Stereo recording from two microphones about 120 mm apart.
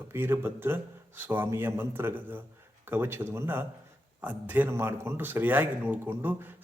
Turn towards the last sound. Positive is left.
turn(degrees=-15)  # may be behind; listen again after turning